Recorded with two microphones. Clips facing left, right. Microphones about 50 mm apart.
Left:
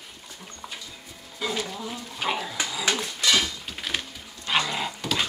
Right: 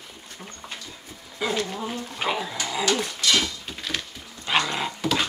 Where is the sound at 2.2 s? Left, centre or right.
Centre.